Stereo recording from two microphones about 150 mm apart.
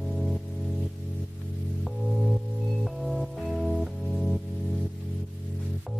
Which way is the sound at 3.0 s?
Centre (ahead or behind).